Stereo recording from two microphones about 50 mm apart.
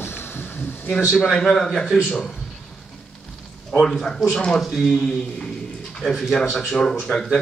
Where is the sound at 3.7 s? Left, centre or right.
Centre.